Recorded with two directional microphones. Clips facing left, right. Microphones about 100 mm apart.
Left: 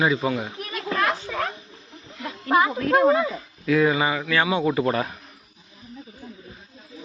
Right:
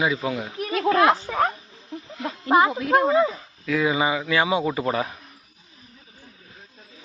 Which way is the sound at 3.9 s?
15° right (ahead or behind).